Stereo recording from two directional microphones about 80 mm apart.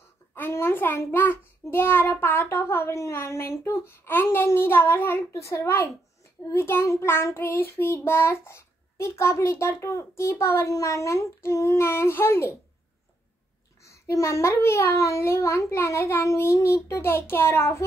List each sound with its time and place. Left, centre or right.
0.3 s a child's voice: left
6.5 s child singing: left
13.8 s child singing: left